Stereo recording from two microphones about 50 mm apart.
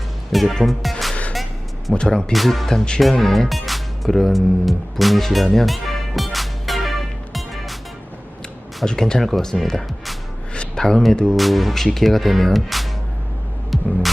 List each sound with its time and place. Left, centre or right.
0.3 s music: centre
1.9 s speech: centre
2.3 s speech: centre
7.3 s music: centre
8.8 s speech: centre
9.6 s music: centre
10.5 s a sound: centre
10.8 s speech: centre